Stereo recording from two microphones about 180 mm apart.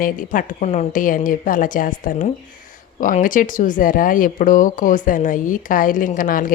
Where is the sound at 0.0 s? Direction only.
45° left (ahead or behind).